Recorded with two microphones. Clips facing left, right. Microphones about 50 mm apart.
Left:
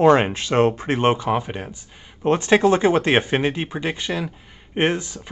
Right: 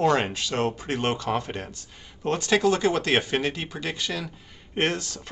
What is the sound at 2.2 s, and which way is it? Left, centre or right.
Speech, left.